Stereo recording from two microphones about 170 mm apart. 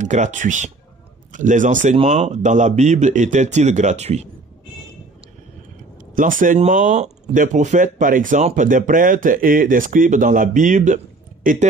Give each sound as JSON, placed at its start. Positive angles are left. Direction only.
{"t": 0.0, "sound": "speech", "side_deg": -45}
{"t": 2.0, "sound": "speech", "side_deg": -35}
{"t": 6.1, "sound": "speech", "side_deg": -50}